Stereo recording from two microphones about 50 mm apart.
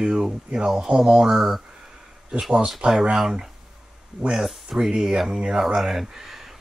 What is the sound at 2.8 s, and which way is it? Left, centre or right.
Speech, right.